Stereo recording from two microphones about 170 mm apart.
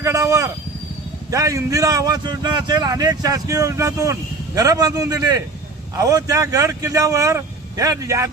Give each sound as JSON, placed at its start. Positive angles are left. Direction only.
{"t": 0.0, "sound": "a man's voice", "side_deg": -20}